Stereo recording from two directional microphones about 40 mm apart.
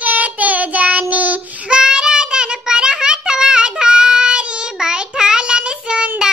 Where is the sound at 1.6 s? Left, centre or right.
Right.